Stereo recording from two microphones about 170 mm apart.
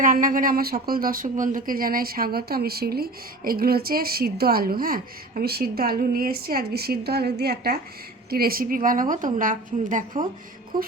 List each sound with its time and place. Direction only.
0.0 s a woman's voice: 50° right (ahead or behind)